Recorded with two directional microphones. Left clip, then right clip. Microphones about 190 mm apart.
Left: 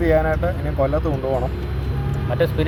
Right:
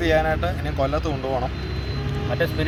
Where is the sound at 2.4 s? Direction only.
25° left (ahead or behind).